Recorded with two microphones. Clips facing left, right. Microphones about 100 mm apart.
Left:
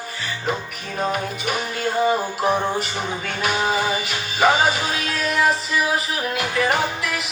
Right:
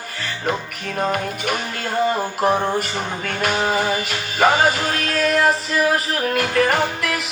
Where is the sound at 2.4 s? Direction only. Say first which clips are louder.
Right 4 dB; 55° right (ahead or behind).